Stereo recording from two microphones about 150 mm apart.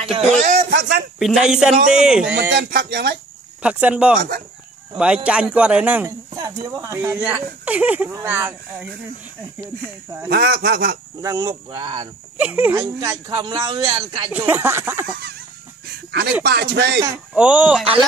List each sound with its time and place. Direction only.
0.0 s speech: 45° right (ahead or behind)
0.5 s speech: 75° right (ahead or behind)
1.2 s speech: 5° right (ahead or behind)
2.7 s speech: 80° right
3.6 s a man's voice: 10° right (ahead or behind)
6.3 s a man's voice: 25° right (ahead or behind)
10.3 s speech: 90° right
11.1 s speech: 20° right (ahead or behind)
12.4 s a man's voice: 10° right (ahead or behind)
12.8 s a man's voice: 25° right (ahead or behind)
16.4 s speech: 90° right
17.3 s a man's voice: 10° right (ahead or behind)